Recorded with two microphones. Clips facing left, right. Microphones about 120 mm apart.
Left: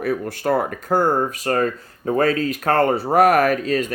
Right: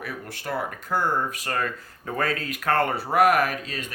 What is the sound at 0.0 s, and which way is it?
Speech, 45° left (ahead or behind).